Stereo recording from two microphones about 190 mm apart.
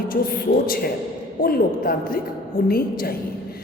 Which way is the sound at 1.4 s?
50° left (ahead or behind).